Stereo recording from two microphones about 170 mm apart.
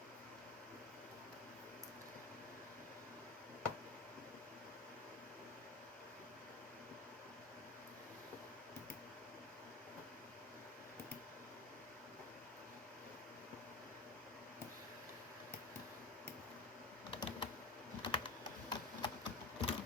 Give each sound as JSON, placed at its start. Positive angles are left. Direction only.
{"t": 17.1, "sound": "computer keyboard", "side_deg": 30}
{"t": 18.7, "sound": "typewriter", "side_deg": 25}